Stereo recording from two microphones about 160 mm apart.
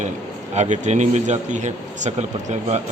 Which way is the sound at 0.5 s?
45° right (ahead or behind).